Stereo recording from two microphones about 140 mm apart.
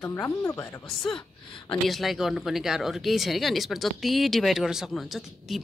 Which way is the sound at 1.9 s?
Centre (ahead or behind).